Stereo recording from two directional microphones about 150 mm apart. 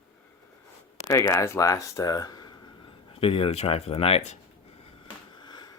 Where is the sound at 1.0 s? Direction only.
20° left (ahead or behind).